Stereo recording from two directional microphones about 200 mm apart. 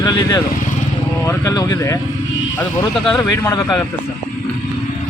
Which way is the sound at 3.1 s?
10° left (ahead or behind).